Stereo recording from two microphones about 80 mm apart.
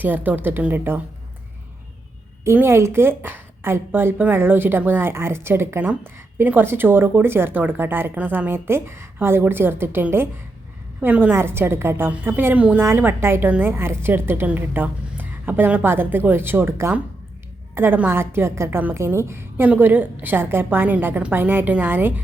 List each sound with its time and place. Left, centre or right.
0.0 s speech: right
2.4 s speech: right; by 12.8 s centre
12.8 s speech: right
19.6 s speech: right